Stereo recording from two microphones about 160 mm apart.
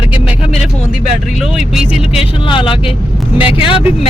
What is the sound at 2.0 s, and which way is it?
Speech, 40° left (ahead or behind).